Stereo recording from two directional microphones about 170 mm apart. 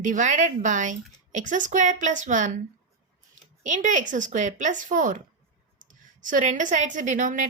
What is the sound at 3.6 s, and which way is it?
A woman's voice, 50° right (ahead or behind).